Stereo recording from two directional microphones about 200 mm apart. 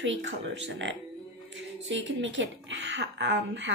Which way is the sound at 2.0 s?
65° right (ahead or behind).